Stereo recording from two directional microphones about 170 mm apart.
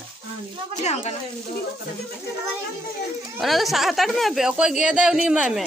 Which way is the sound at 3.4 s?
Centre (ahead or behind).